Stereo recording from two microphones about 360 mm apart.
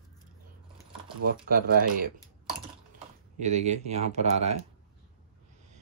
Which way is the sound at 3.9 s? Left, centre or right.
Centre.